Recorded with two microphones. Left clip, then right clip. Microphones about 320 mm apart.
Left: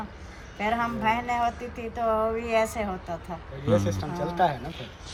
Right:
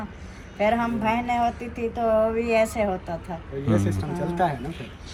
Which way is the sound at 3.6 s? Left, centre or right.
Centre.